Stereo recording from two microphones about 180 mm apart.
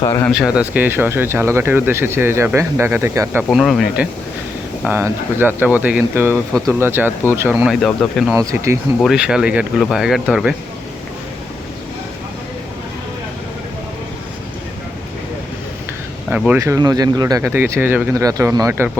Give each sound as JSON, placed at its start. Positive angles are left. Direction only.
{"t": 0.0, "sound": "speech", "side_deg": 20}
{"t": 0.3, "sound": "speech", "side_deg": -5}
{"t": 3.5, "sound": "speech", "side_deg": 0}
{"t": 7.8, "sound": "speech", "side_deg": 5}
{"t": 8.3, "sound": "speech", "side_deg": -15}
{"t": 9.0, "sound": "speech", "side_deg": 0}
{"t": 16.5, "sound": "speech", "side_deg": -15}